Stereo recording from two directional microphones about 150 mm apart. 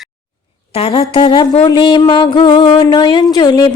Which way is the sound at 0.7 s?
40° left (ahead or behind).